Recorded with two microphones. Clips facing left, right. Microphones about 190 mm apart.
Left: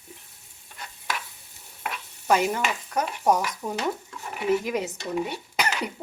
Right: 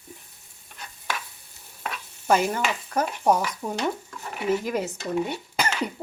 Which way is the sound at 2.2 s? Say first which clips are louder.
Right 1 dB; centre (ahead or behind).